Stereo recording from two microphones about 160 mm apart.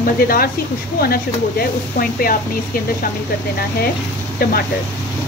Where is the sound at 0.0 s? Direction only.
65° left (ahead or behind).